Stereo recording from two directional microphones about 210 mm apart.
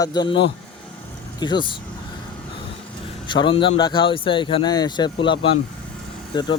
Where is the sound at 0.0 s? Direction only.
20° left (ahead or behind).